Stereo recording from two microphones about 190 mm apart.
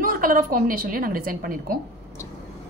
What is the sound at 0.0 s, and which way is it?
A woman's voice, 50° right (ahead or behind).